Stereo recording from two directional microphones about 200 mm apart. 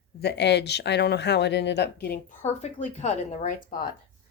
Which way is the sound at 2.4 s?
35° left (ahead or behind).